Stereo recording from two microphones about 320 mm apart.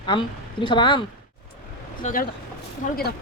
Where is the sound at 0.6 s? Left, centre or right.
Centre.